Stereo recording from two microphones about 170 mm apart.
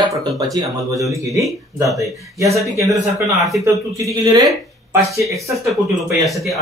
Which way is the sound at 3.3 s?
Centre (ahead or behind).